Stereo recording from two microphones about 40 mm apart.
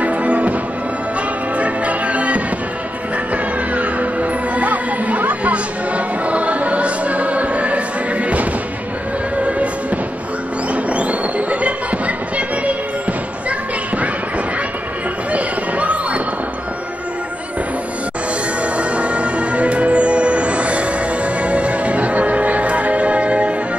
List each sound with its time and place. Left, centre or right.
0.0 s music: right
1.6 s music: right
3.7 s music: right
15.3 s music: right
18.6 s music: right